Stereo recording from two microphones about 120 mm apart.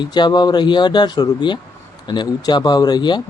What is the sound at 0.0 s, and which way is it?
A man's voice, 40° left (ahead or behind).